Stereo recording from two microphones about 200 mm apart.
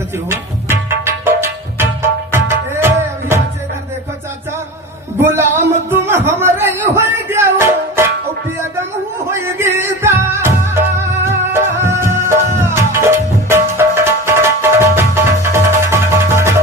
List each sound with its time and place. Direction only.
0.3 s music: 10° right (ahead or behind)
5.2 s a sound: 10° right (ahead or behind)
9.3 s music: 10° right (ahead or behind)